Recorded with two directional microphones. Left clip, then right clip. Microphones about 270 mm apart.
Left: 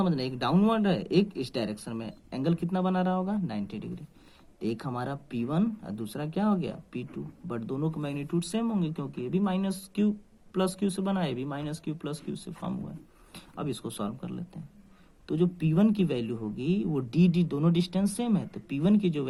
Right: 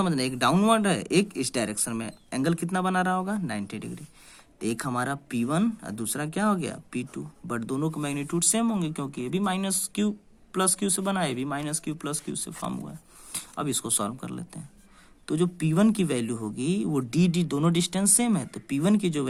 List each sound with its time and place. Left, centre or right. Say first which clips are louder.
0.0 s speech: right 5 dB; right